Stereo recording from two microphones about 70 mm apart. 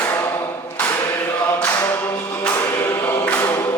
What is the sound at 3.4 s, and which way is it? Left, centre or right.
Music, left.